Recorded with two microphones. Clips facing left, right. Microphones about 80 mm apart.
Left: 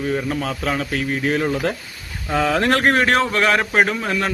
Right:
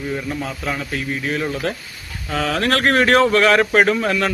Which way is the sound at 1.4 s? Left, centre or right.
Centre.